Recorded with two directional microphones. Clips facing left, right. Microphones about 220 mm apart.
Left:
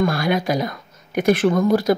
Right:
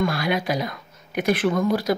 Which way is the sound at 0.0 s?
45° left (ahead or behind).